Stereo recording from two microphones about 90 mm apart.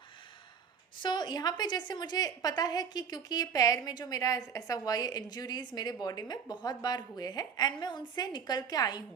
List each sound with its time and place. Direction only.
1.0 s a woman's voice: 55° left (ahead or behind)